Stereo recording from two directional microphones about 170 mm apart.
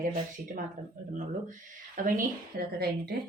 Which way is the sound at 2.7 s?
70° right (ahead or behind).